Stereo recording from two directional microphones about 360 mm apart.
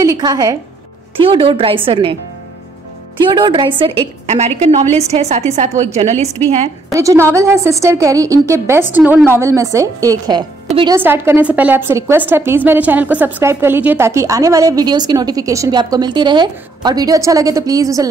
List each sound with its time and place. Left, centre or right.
0.0 s a woman's voice: centre
3.2 s a woman's voice: centre